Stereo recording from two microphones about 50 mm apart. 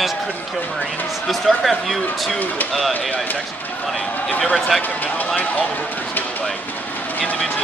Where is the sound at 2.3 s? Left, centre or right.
Left.